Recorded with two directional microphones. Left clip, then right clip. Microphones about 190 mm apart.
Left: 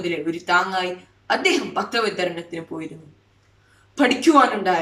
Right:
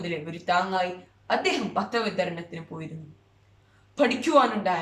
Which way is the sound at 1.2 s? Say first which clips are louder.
Left 5 dB; 20° right (ahead or behind).